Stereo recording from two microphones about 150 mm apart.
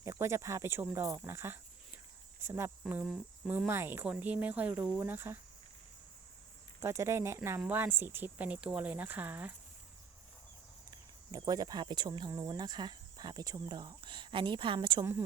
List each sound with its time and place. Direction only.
0.0 s speech: 20° right (ahead or behind)
6.7 s speech: 15° right (ahead or behind)
10.9 s speech: 25° right (ahead or behind)